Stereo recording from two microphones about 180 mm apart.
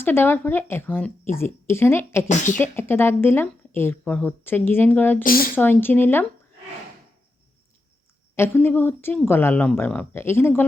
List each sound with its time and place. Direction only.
0.0 s speech: 10° left (ahead or behind)
2.2 s speech: 45° left (ahead or behind)
2.6 s speech: 10° left (ahead or behind)
5.2 s speech: 55° left (ahead or behind)
5.5 s speech: 10° left (ahead or behind)
8.4 s speech: 10° left (ahead or behind)